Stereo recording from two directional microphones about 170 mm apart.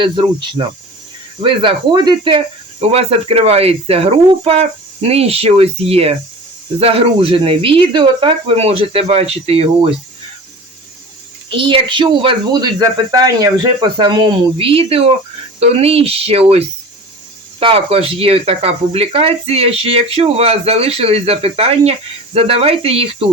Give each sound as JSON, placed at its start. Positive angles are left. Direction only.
{"t": 0.0, "sound": "speech", "side_deg": -30}
{"t": 11.4, "sound": "speech", "side_deg": -30}